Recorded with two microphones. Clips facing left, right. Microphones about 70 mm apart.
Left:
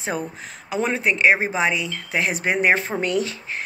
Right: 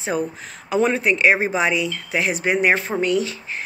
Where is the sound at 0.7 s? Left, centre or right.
Centre; by 2.8 s left.